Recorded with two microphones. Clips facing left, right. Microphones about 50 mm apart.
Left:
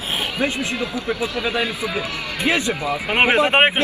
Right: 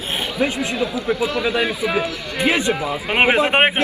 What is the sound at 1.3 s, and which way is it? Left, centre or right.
Speech, right.